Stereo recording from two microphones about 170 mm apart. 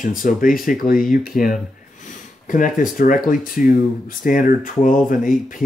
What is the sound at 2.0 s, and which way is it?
Snort, 50° left (ahead or behind).